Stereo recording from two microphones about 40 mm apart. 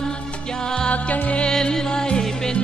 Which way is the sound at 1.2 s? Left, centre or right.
Left.